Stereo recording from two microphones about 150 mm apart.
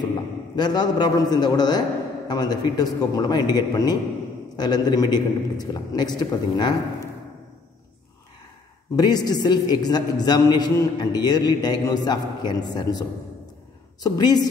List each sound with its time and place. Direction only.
0.6 s a man's voice: 30° left (ahead or behind)
8.9 s a man's voice: 25° left (ahead or behind)
14.0 s a man's voice: 25° left (ahead or behind)